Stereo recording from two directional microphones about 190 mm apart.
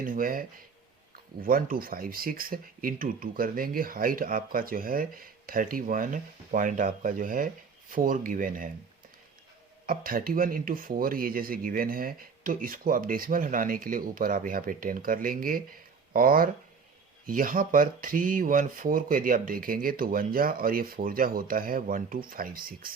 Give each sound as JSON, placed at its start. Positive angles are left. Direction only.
{"t": 0.0, "sound": "speech", "side_deg": -50}
{"t": 9.8, "sound": "speech", "side_deg": -50}